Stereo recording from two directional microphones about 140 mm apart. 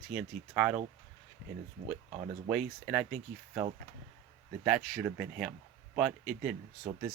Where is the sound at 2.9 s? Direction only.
10° right (ahead or behind).